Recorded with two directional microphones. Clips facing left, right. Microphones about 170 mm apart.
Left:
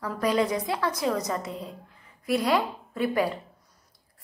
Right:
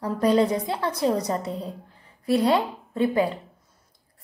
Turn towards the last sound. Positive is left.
turn(degrees=-25)  # may be behind; listen again after turning